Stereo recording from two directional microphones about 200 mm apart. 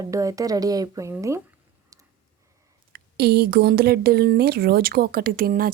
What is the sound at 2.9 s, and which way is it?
Speech, 50° right (ahead or behind).